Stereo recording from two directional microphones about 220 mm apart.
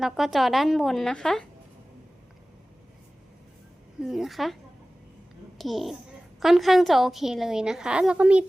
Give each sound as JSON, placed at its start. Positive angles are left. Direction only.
{"t": 0.0, "sound": "a woman's voice", "side_deg": 0}
{"t": 4.0, "sound": "a woman's voice", "side_deg": 0}
{"t": 5.5, "sound": "a child's voice", "side_deg": 0}